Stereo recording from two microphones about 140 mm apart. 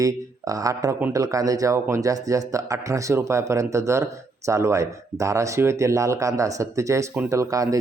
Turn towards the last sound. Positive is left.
turn(degrees=-25)  # may be behind; listen again after turning